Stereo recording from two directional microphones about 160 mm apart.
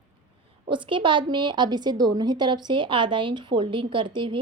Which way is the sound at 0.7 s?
30° right (ahead or behind).